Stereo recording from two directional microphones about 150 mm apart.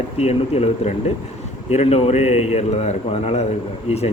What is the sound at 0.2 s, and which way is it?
A man's voice, 45° left (ahead or behind).